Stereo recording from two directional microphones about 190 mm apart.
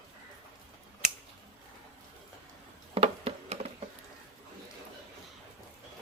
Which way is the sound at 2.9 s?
30° right (ahead or behind).